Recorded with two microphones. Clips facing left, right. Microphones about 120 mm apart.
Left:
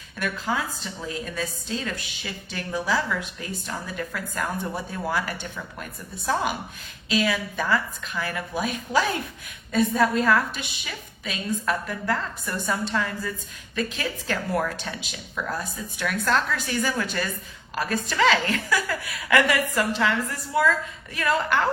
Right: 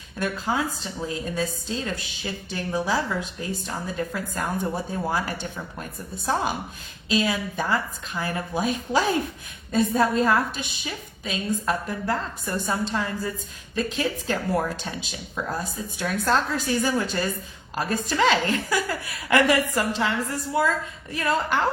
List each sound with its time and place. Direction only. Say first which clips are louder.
0.2 s a woman's voice: right 2 dB; 30° right (ahead or behind)